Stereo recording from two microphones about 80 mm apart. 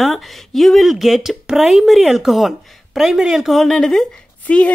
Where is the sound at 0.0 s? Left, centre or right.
Centre.